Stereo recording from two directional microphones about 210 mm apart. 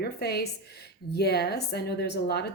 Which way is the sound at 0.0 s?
50° left (ahead or behind).